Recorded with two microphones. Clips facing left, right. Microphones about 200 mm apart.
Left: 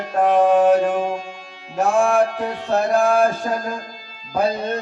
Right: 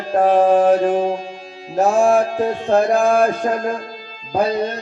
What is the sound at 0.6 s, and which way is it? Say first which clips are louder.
Music: right 2 dB; 35° right (ahead or behind).